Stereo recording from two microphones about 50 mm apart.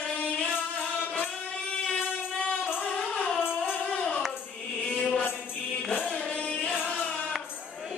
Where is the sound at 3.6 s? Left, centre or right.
Left.